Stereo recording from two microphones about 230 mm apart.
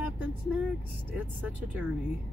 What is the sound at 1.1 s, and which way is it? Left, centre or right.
Speech, centre.